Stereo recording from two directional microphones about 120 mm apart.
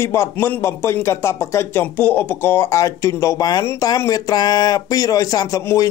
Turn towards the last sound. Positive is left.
turn(degrees=30)  # may be behind; listen again after turning